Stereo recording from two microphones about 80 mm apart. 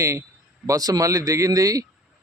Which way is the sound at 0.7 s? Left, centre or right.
Right.